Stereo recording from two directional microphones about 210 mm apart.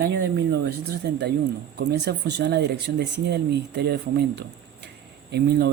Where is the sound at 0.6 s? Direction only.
55° right (ahead or behind).